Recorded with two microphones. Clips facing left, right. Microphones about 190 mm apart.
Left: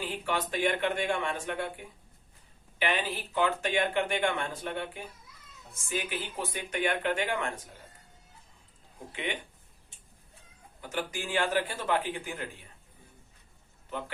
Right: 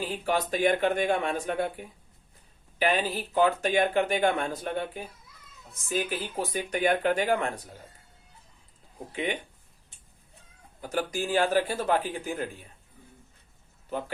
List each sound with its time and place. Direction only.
0.0 s speech: 40° right (ahead or behind)
2.7 s speech: 35° right (ahead or behind)
10.8 s speech: 40° right (ahead or behind)